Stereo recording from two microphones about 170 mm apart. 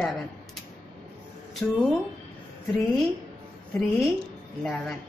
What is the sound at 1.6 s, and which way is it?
Speech, 5° left (ahead or behind).